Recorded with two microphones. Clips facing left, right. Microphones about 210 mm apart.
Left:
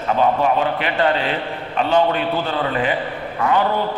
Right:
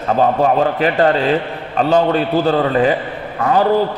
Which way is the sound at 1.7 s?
40° right (ahead or behind).